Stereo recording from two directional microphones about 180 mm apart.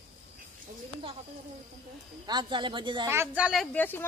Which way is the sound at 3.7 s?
10° left (ahead or behind).